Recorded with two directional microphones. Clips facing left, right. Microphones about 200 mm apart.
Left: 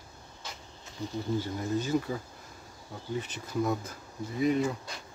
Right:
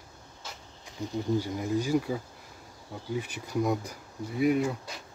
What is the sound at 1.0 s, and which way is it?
Speech, 15° right (ahead or behind).